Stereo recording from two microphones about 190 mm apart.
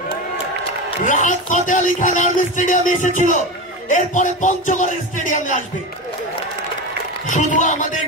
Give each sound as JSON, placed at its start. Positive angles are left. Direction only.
{"t": 1.0, "sound": "speech", "side_deg": 40}
{"t": 7.2, "sound": "speech", "side_deg": 40}